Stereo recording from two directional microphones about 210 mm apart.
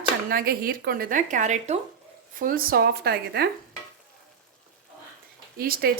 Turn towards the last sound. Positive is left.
turn(degrees=-45)  # may be behind; listen again after turning